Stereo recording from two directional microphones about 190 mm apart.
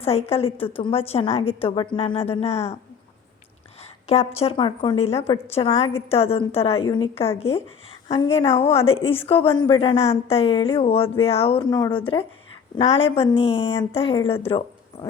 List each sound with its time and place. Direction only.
0.0 s a woman's voice: 30° left (ahead or behind)
4.0 s a woman's voice: 35° left (ahead or behind)